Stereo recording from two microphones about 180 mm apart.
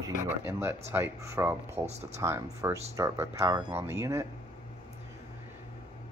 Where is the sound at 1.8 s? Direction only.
35° right (ahead or behind).